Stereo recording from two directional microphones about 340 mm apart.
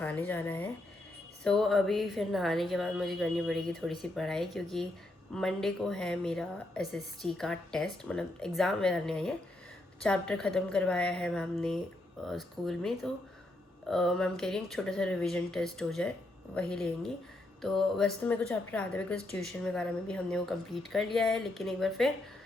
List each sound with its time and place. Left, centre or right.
0.0 s speech: centre